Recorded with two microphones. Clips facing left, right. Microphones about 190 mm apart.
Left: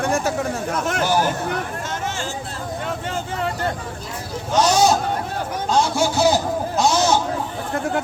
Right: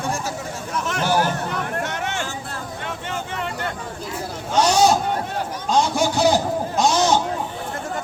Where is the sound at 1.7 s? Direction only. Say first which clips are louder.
Right 1 dB; 65° right (ahead or behind).